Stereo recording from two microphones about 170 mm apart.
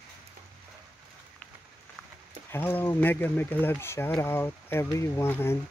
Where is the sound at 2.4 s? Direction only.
10° left (ahead or behind).